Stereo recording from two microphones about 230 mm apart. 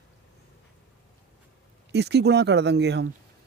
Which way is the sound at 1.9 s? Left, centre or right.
Right.